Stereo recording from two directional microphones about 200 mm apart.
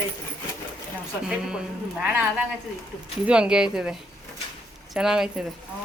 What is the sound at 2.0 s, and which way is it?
Speech, 10° right (ahead or behind).